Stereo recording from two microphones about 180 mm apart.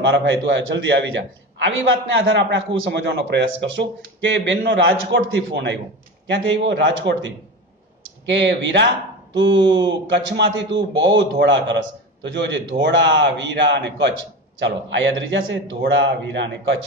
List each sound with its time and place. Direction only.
0.0 s a man's voice: 80° right
6.2 s a man's voice: 90° right
14.6 s a man's voice: 90° right